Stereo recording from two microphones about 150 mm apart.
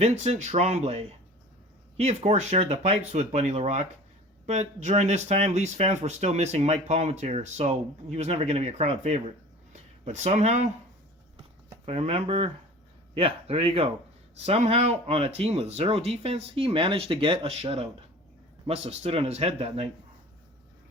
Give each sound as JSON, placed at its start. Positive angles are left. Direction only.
{"t": 0.0, "sound": "speech", "side_deg": -45}
{"t": 11.9, "sound": "speech", "side_deg": -40}